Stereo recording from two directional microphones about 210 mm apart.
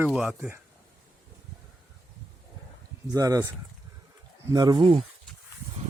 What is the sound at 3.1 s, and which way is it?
Speech, 15° right (ahead or behind).